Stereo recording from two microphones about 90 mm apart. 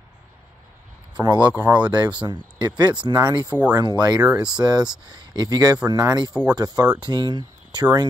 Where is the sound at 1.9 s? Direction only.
50° right (ahead or behind).